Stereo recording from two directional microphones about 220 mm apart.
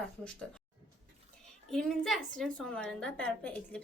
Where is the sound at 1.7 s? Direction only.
Centre (ahead or behind).